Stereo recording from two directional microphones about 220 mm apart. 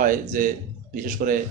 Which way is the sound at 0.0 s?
35° right (ahead or behind).